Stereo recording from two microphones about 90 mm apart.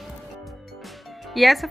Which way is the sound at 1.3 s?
Centre (ahead or behind).